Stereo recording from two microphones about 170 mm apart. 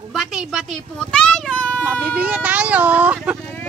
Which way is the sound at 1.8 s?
10° right (ahead or behind).